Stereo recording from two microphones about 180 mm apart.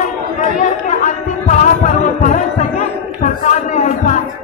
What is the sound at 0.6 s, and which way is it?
Music, 45° left (ahead or behind).